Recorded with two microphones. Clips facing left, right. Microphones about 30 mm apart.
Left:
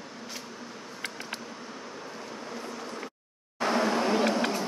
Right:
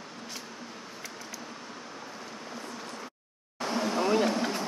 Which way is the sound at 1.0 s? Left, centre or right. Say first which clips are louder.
Left 8 dB; left.